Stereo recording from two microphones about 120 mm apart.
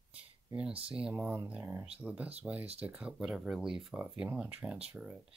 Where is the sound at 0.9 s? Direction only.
10° right (ahead or behind).